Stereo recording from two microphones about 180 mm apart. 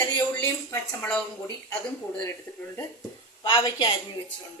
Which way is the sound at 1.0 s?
5° left (ahead or behind).